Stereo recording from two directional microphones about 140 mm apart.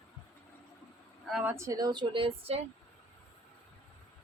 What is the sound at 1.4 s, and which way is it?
A woman's voice, 20° right (ahead or behind).